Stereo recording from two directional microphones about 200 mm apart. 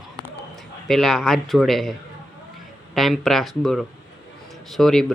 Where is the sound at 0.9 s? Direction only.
Centre (ahead or behind).